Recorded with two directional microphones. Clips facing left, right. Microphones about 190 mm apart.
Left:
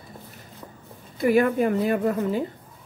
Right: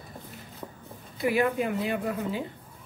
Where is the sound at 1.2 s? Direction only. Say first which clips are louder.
Left 6 dB; 45° left (ahead or behind).